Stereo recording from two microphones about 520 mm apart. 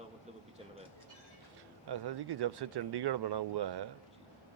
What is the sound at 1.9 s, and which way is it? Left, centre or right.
Speech, right.